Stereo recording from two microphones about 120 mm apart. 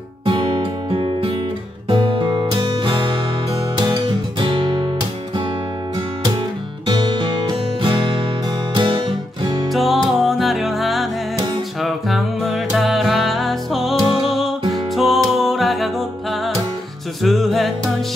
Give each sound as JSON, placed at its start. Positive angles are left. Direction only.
{"t": 0.2, "sound": "music", "side_deg": -45}
{"t": 4.5, "sound": "music", "side_deg": -45}
{"t": 6.9, "sound": "music", "side_deg": -40}
{"t": 9.7, "sound": "music", "side_deg": 0}